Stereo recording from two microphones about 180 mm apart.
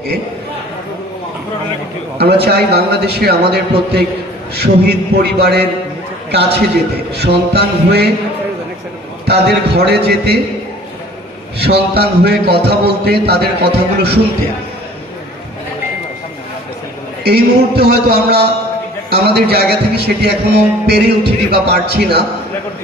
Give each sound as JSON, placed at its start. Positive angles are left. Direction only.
{"t": 2.1, "sound": "speech", "side_deg": -65}
{"t": 7.2, "sound": "speech", "side_deg": -65}
{"t": 9.2, "sound": "speech", "side_deg": -65}
{"t": 11.6, "sound": "speech", "side_deg": -65}
{"t": 17.2, "sound": "speech", "side_deg": -60}